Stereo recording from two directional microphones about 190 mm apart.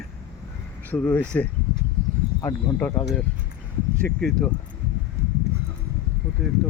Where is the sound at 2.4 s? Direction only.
20° left (ahead or behind).